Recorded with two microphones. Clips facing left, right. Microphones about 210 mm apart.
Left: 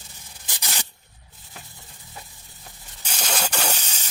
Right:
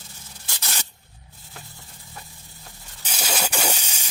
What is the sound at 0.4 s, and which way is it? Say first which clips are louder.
Spray: left 1 dB; 15° left (ahead or behind).